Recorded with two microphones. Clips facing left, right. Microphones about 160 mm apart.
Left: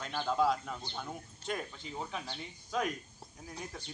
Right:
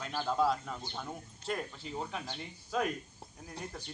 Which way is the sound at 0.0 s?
5° right (ahead or behind).